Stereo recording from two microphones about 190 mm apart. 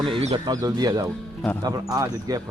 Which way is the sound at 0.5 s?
20° right (ahead or behind).